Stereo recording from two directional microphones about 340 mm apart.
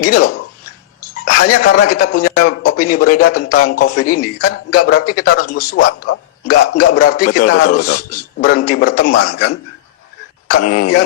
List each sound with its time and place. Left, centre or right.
0.0 s speech: left
1.6 s speech: left
10.6 s speech: left